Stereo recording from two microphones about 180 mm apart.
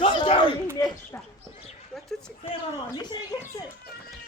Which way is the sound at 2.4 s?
25° left (ahead or behind).